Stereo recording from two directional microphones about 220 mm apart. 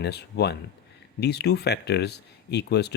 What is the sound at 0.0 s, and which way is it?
Speech, 50° left (ahead or behind).